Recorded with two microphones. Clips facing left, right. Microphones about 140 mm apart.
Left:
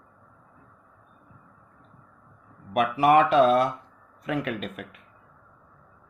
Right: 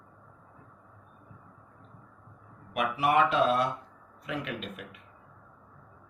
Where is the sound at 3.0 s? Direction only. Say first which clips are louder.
Left 6 dB; 50° left (ahead or behind).